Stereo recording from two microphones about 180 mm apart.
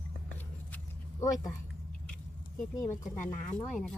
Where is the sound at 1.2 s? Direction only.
15° left (ahead or behind).